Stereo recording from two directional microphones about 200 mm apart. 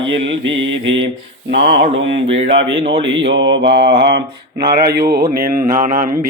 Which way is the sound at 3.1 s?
65° right (ahead or behind).